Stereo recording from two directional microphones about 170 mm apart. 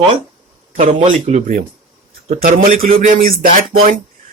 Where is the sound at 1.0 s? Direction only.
45° right (ahead or behind).